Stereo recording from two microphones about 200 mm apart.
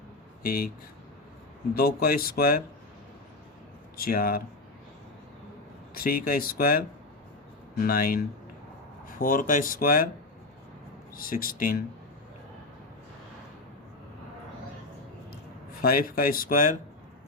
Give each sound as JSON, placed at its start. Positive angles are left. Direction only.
{"t": 0.4, "sound": "speech", "side_deg": 50}
{"t": 1.7, "sound": "speech", "side_deg": 50}
{"t": 3.9, "sound": "speech", "side_deg": 45}
{"t": 5.9, "sound": "speech", "side_deg": 50}
{"t": 11.1, "sound": "speech", "side_deg": 45}
{"t": 15.8, "sound": "speech", "side_deg": 45}